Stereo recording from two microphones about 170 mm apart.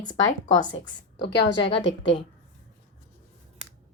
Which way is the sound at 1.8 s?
90° left.